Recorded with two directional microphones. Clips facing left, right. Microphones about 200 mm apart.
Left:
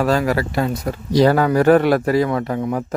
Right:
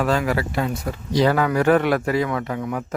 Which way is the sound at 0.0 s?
40° left (ahead or behind).